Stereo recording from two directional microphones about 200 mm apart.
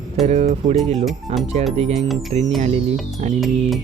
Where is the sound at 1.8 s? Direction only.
35° right (ahead or behind).